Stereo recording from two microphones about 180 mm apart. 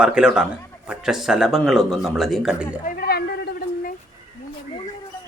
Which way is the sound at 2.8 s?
55° left (ahead or behind).